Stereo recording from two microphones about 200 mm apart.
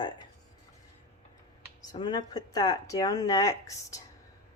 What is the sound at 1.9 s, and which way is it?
A woman's voice, 20° left (ahead or behind).